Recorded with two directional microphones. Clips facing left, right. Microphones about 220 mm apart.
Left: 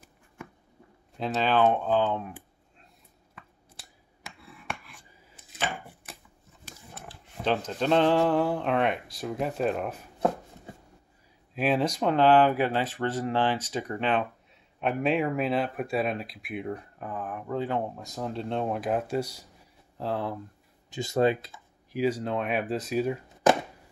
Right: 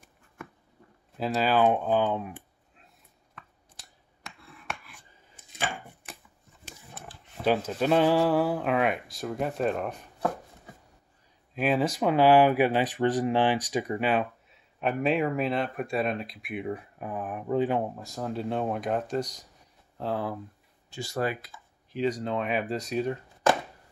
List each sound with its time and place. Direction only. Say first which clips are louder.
1.1 s speech: even; 5° right (ahead or behind)
4.2 s scissors: left 1 dB; 5° left (ahead or behind)
7.1 s speech: right 2 dB; 10° right (ahead or behind)
11.5 s speech: even; centre (ahead or behind); by 17.8 s 15° right (ahead or behind)
17.9 s speech: right 1 dB; centre (ahead or behind)
20.9 s speech: left 6 dB; 20° left (ahead or behind)
21.9 s speech: left 1 dB; 5° left (ahead or behind)